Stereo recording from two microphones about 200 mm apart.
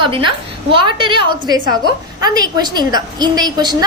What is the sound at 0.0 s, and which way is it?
A woman's voice, 25° right (ahead or behind).